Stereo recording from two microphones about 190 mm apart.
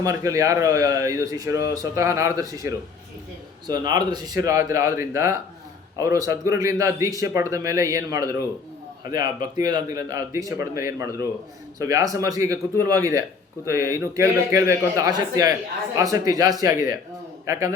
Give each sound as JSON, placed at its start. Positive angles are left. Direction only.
{"t": 0.0, "sound": "a man's voice", "side_deg": -15}